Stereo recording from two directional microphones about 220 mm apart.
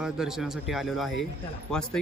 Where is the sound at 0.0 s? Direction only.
Centre (ahead or behind).